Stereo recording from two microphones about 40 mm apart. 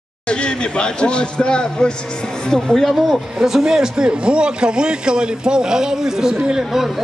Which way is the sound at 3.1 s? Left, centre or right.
Centre.